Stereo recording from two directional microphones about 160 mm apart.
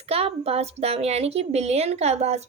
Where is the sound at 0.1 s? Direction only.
40° right (ahead or behind).